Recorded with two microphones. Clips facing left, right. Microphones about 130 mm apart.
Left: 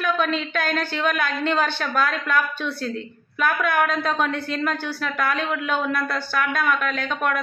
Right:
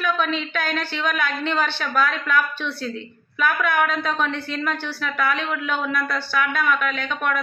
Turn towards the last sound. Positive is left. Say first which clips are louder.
# left 1 dB
turn(degrees=40)  # may be behind; listen again after turning